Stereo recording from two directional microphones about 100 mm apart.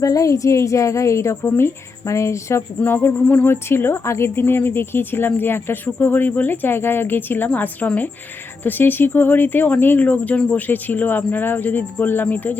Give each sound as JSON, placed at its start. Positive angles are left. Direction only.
{"t": 0.0, "sound": "a woman's voice", "side_deg": 35}